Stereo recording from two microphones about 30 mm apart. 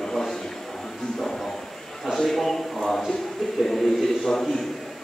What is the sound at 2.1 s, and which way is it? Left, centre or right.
Speech, centre.